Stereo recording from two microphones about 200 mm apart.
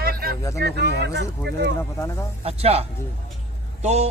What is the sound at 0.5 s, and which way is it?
Speech, 55° right (ahead or behind).